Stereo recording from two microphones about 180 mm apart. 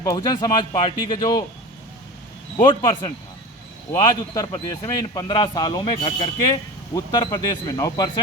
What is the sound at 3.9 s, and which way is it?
A man's voice, 25° left (ahead or behind).